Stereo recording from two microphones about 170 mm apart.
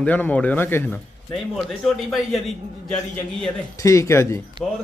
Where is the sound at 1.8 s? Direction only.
Centre (ahead or behind).